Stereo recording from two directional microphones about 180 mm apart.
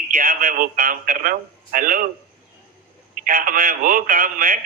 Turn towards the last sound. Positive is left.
turn(degrees=-50)  # may be behind; listen again after turning